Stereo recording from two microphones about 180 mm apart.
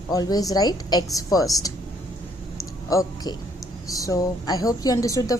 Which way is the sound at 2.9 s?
20° left (ahead or behind).